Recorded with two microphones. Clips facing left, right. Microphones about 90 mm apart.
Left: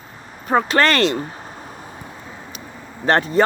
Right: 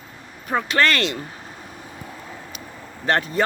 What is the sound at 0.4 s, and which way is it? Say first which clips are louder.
Vehicle: left 4 dB; 35° left (ahead or behind).